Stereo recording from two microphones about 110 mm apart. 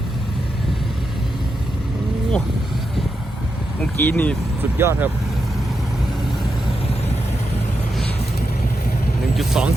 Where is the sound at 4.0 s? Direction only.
15° left (ahead or behind).